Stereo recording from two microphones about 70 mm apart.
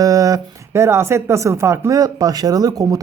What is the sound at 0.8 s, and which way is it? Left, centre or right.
Speech, right.